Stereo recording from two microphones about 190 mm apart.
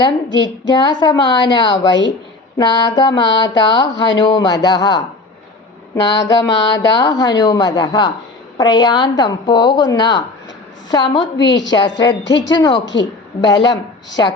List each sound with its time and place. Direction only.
0.0 s a woman's voice: 25° left (ahead or behind)
6.1 s a woman's voice: 20° left (ahead or behind)
11.3 s a woman's voice: 70° left (ahead or behind)
11.7 s a woman's voice: 20° left (ahead or behind)
12.8 s a woman's voice: 75° left (ahead or behind)
14.2 s a woman's voice: 20° left (ahead or behind)